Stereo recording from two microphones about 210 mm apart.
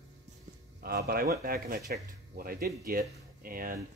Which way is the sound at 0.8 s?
50° right (ahead or behind).